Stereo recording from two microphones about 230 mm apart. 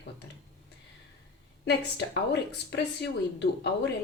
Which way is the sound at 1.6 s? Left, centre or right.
Left.